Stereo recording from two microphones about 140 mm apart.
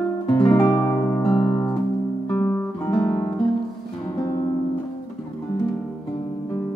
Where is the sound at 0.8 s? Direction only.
20° left (ahead or behind).